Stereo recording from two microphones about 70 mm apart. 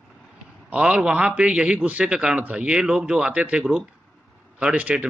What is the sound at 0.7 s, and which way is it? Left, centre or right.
Speech, centre.